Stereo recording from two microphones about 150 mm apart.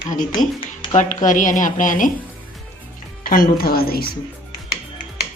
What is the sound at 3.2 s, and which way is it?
Speech, 75° left (ahead or behind).